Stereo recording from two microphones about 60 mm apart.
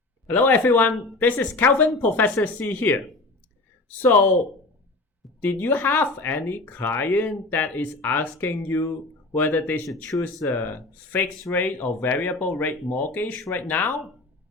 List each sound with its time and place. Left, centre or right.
0.3 s speech: left
5.4 s speech: left
10.1 s speech: left